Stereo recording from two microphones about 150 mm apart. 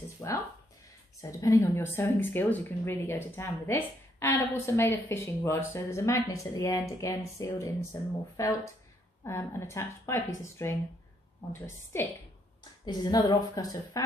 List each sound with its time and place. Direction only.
0.2 s speech: 20° left (ahead or behind)
1.4 s speech: 20° left (ahead or behind)
11.9 s speech: 15° left (ahead or behind)
12.8 s speech: 30° left (ahead or behind)